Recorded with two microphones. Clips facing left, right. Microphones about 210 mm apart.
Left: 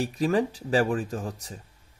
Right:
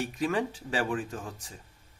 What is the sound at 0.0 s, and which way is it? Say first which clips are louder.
Speech: left 5 dB; 35° left (ahead or behind).